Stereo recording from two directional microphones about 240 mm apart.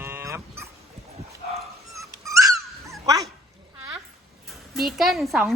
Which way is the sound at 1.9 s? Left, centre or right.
Centre.